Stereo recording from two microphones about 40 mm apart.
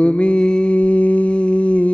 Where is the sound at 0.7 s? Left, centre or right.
Left.